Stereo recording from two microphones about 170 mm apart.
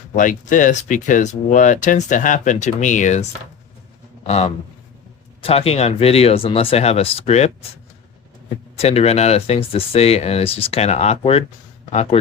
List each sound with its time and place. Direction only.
0.2 s a man's voice: 50° left (ahead or behind)
8.8 s speech: 35° left (ahead or behind)